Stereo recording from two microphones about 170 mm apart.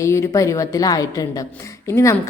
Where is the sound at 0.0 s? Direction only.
15° left (ahead or behind).